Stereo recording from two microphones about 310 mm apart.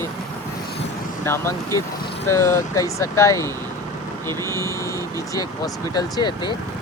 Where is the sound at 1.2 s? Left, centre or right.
Centre.